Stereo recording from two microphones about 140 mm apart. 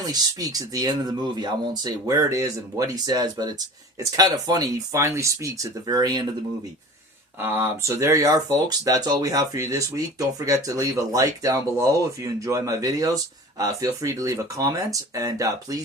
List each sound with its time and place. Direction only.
0.1 s speech: 25° right (ahead or behind)
7.3 s speech: 15° right (ahead or behind)